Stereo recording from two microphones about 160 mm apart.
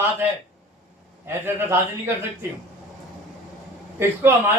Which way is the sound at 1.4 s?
15° right (ahead or behind).